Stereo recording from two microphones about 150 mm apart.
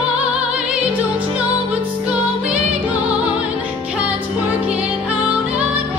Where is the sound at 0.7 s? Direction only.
10° right (ahead or behind).